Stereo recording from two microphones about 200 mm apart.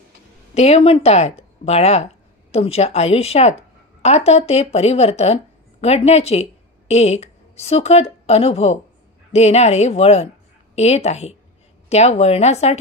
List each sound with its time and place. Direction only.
0.6 s speech: 30° left (ahead or behind)